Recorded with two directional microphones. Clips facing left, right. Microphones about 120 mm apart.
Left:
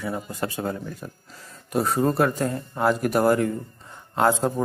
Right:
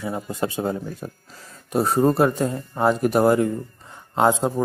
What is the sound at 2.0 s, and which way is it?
Speech, 10° right (ahead or behind).